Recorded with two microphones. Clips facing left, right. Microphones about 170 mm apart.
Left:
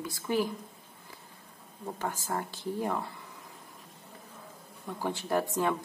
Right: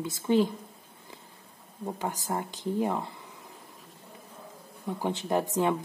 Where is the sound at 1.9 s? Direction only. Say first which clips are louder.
Right 2 dB; 15° right (ahead or behind).